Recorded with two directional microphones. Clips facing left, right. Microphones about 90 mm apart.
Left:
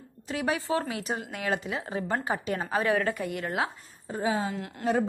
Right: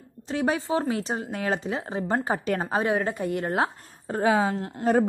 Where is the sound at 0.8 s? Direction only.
35° right (ahead or behind).